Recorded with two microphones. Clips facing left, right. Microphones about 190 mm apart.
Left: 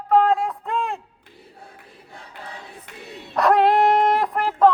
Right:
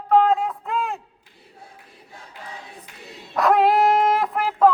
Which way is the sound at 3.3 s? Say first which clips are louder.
Left 1 dB; centre (ahead or behind).